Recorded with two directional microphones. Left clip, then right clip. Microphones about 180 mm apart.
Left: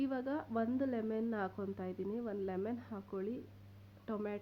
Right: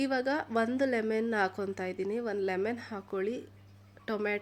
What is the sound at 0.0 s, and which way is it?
A woman's voice, 15° right (ahead or behind).